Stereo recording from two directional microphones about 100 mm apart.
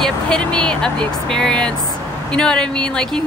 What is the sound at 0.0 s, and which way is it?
Speech, 10° left (ahead or behind).